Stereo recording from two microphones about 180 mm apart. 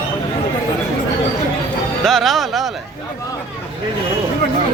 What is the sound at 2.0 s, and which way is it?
Speech, centre (ahead or behind).